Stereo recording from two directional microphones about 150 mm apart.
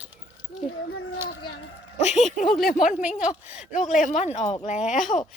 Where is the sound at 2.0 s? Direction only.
50° left (ahead or behind).